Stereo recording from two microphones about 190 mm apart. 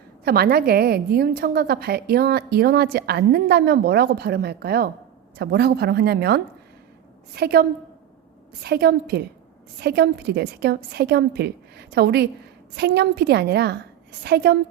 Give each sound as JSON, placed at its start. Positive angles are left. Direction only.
{"t": 0.3, "sound": "a woman's voice", "side_deg": -55}